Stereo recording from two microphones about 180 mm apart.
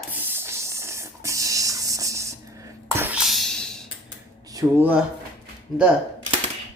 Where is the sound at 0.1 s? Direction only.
10° right (ahead or behind).